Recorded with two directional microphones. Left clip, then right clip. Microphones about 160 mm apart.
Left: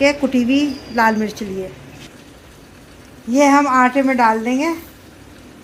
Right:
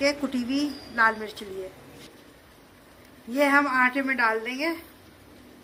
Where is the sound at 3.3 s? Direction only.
20° left (ahead or behind).